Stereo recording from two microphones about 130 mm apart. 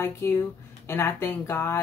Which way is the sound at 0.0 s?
15° left (ahead or behind).